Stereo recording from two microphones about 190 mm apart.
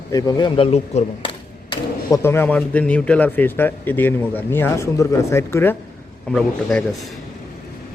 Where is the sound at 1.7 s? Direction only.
20° left (ahead or behind).